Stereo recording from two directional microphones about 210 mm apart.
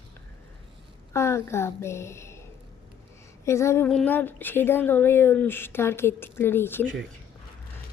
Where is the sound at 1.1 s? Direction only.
10° left (ahead or behind).